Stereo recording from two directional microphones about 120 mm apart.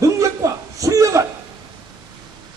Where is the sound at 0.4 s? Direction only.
25° right (ahead or behind).